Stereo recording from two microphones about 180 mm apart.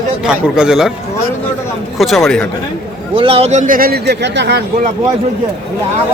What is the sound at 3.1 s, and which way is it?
A man's voice, 30° right (ahead or behind).